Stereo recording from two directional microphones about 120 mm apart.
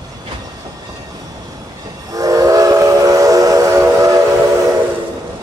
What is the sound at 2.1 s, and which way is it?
Train, 30° right (ahead or behind).